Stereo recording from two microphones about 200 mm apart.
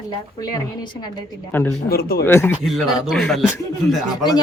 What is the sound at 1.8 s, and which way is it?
Speech, 50° left (ahead or behind).